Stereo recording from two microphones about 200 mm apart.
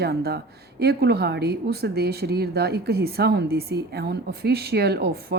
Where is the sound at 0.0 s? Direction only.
50° right (ahead or behind).